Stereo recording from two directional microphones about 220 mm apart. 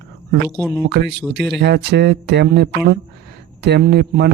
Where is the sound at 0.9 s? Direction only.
50° right (ahead or behind).